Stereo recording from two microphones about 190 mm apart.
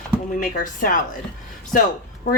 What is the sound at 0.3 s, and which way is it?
Speech, 45° left (ahead or behind).